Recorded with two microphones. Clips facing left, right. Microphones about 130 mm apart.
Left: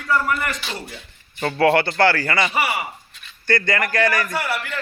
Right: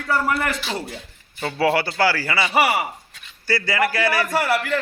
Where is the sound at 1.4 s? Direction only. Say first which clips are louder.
Left 3 dB; 5° right (ahead or behind).